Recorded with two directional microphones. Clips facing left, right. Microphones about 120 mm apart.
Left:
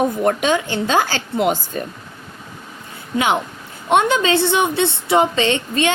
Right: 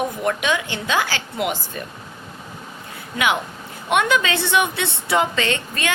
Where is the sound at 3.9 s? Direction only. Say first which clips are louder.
Left 4 dB; 30° left (ahead or behind).